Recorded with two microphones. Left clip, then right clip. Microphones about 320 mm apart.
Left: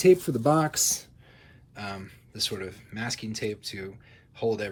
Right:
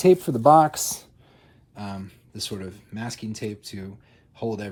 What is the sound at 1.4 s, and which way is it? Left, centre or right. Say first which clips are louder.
Speech: even; centre.